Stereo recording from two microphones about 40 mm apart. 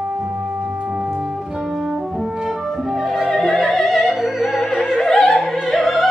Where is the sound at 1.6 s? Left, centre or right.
Centre.